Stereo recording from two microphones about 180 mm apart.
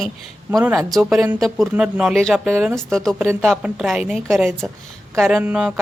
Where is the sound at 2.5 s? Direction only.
15° right (ahead or behind).